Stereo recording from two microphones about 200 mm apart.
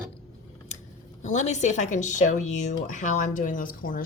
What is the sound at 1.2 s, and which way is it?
Speech, 35° left (ahead or behind).